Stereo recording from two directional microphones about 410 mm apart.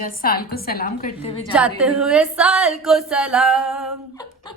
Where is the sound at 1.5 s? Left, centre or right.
Centre.